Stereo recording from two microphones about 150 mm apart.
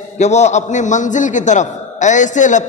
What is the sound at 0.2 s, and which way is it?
A man's voice, 50° left (ahead or behind).